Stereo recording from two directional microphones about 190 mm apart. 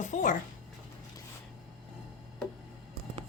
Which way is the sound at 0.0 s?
40° left (ahead or behind).